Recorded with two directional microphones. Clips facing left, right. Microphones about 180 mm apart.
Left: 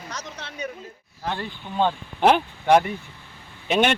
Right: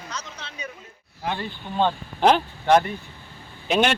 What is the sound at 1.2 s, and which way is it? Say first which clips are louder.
Speech: right 1 dB; 10° right (ahead or behind).